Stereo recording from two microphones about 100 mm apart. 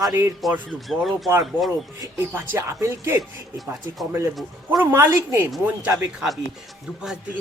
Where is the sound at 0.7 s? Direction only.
Centre (ahead or behind).